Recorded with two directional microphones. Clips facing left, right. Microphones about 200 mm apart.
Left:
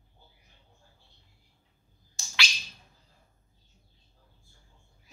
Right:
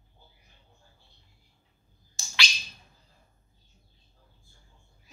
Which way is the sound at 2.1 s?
Centre (ahead or behind).